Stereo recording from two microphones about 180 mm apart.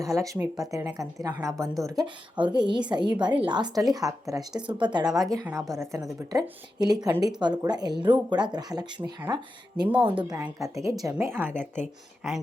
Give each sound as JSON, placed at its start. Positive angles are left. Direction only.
{"t": 0.0, "sound": "a woman's voice", "side_deg": -20}
{"t": 10.3, "sound": "speech", "side_deg": -15}
{"t": 12.2, "sound": "speech", "side_deg": 0}